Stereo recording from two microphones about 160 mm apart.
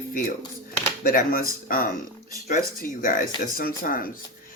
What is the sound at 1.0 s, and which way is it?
Speech, 65° left (ahead or behind).